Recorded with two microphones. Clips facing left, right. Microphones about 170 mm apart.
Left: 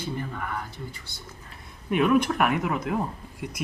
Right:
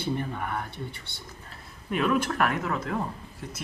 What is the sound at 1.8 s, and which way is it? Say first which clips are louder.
Speech: left 4 dB; 5° left (ahead or behind).